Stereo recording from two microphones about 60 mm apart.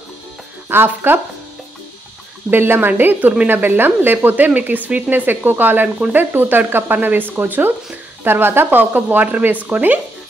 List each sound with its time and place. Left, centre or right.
0.7 s speech: right
2.5 s speech: right